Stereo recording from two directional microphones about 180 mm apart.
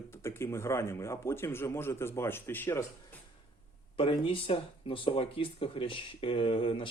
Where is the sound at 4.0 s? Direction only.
30° left (ahead or behind).